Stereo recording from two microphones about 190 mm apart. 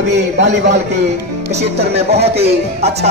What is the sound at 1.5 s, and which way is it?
Speech, 35° right (ahead or behind).